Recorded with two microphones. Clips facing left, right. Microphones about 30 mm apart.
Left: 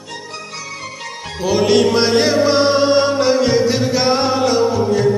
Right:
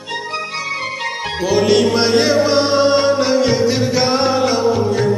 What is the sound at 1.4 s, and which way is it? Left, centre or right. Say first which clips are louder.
Music: even; centre.